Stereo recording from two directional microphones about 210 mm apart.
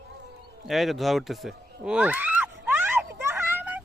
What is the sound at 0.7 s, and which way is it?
Speech, centre (ahead or behind).